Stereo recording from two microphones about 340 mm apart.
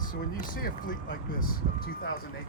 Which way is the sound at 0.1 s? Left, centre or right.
Left.